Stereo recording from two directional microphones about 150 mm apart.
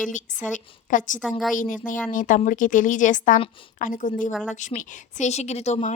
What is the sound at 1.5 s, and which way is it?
A woman's voice, 60° left (ahead or behind).